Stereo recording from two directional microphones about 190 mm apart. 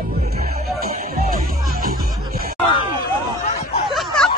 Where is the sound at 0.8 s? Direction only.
55° right (ahead or behind).